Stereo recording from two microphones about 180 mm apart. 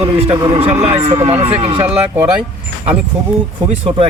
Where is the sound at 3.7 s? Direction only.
30° right (ahead or behind).